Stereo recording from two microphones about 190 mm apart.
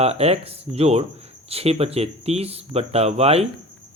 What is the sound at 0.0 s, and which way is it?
Speech, 35° right (ahead or behind).